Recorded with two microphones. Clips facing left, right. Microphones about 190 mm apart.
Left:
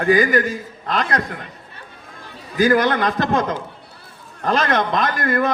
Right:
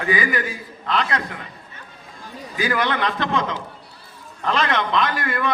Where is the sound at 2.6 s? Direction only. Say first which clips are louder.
Left 6 dB; 45° left (ahead or behind).